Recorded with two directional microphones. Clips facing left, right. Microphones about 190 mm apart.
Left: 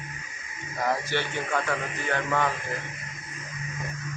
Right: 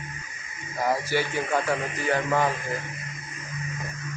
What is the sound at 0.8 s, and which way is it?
Speech, 10° right (ahead or behind).